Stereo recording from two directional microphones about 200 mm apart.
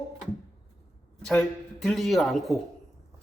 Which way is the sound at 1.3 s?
5° left (ahead or behind).